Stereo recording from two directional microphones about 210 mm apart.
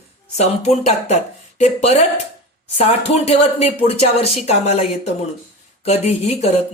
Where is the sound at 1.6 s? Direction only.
30° left (ahead or behind).